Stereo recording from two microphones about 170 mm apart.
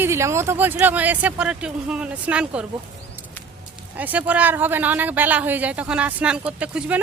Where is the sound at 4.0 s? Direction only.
10° right (ahead or behind).